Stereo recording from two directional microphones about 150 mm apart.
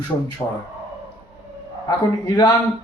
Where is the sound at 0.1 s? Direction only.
30° left (ahead or behind).